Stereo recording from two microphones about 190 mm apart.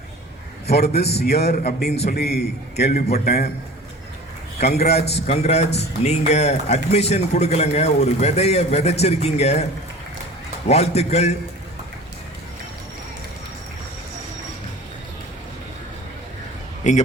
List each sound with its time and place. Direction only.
0.7 s a man's voice: 60° left (ahead or behind)
4.6 s a man's voice: 55° left (ahead or behind)
5.2 s a man's voice: 35° left (ahead or behind)
10.7 s a man's voice: 35° left (ahead or behind)
16.9 s a man's voice: 40° left (ahead or behind)